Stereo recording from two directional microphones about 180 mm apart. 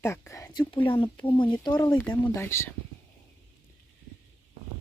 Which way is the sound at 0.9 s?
30° left (ahead or behind).